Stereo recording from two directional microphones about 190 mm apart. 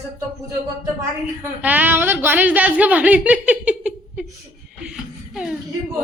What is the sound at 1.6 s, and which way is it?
Speech, 10° right (ahead or behind).